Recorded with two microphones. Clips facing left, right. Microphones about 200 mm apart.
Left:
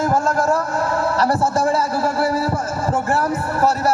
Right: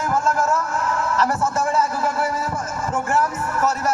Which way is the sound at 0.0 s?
35° left (ahead or behind).